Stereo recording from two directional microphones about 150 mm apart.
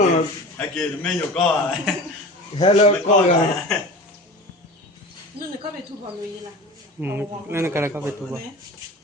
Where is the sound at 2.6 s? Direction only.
45° left (ahead or behind).